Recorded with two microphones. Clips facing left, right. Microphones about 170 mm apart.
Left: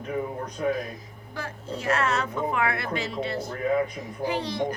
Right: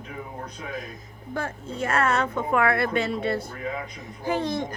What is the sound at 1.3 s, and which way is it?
A woman's voice, 50° right (ahead or behind).